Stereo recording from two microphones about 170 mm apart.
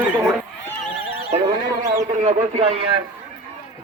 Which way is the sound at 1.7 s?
20° right (ahead or behind).